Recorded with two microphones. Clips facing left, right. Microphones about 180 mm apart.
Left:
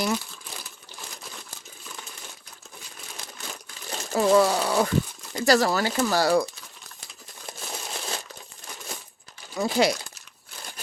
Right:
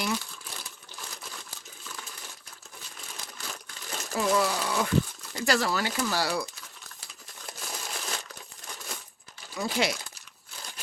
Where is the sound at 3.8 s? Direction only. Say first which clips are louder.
Left 6 dB; 30° left (ahead or behind).